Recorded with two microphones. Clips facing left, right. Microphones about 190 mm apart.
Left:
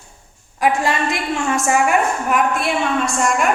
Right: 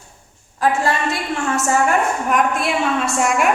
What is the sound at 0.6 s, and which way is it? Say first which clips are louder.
A woman's voice: even; 15° left (ahead or behind).